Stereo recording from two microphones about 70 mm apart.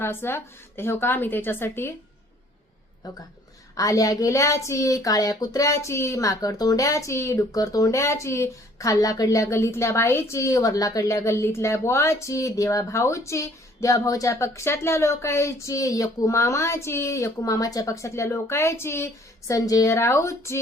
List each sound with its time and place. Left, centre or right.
0.0 s a woman's voice: left
3.8 s a woman's voice: left
4.3 s speech: left
19.5 s a woman's voice: left
19.9 s a woman's voice: left